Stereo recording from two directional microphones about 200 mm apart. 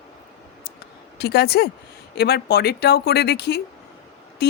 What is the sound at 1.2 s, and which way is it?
Speech, 55° left (ahead or behind).